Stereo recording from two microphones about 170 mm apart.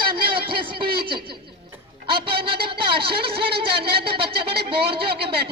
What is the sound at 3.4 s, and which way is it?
Speech, 70° right (ahead or behind).